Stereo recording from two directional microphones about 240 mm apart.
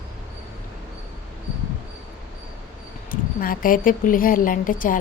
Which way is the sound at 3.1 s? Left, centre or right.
Left.